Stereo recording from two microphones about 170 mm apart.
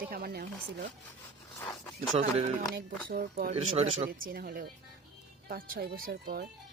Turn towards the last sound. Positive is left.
turn(degrees=-60)  # may be behind; listen again after turning